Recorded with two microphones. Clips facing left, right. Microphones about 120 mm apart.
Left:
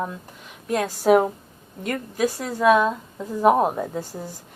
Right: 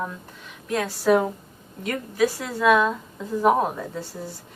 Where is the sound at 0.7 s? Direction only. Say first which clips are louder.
Left 2 dB; 45° left (ahead or behind).